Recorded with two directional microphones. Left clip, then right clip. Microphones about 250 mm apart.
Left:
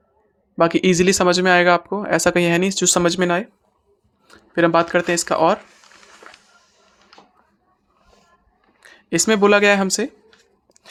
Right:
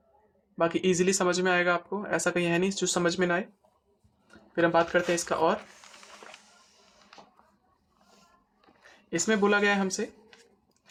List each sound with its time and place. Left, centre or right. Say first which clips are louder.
0.5 s speech: left 10 dB; left
8.8 s speech: left 11 dB; left